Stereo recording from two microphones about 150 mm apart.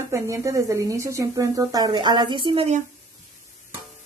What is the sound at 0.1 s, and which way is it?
A woman's voice, 20° right (ahead or behind).